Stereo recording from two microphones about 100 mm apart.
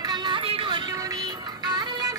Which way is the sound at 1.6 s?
45° right (ahead or behind).